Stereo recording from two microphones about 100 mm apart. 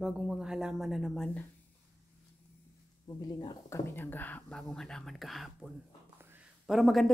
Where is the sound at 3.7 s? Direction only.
20° left (ahead or behind).